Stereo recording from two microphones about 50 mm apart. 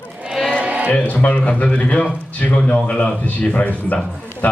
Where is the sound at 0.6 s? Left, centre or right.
Right.